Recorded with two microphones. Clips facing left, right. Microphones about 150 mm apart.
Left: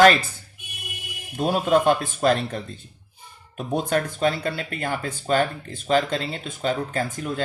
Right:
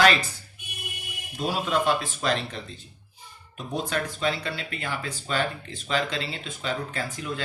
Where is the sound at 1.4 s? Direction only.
50° left (ahead or behind).